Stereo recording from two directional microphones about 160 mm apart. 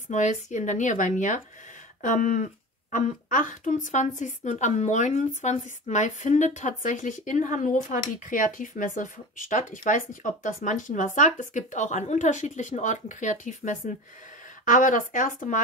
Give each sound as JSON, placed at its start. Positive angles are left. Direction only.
{"t": 0.1, "sound": "a child's voice", "side_deg": 50}